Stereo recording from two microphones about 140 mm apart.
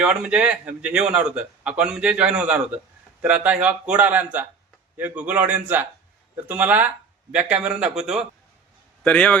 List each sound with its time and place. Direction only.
0.0 s a man's voice: 5° right (ahead or behind)
9.0 s a man's voice: 10° left (ahead or behind)